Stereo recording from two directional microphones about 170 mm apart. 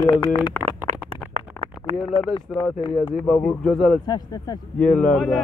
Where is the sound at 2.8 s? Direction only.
30° left (ahead or behind).